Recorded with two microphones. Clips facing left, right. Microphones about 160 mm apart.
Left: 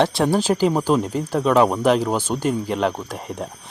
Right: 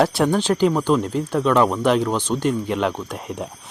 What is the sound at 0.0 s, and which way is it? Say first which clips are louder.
Speech: even; 5° right (ahead or behind).